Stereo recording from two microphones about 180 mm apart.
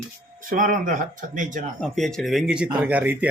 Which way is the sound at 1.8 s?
5° left (ahead or behind).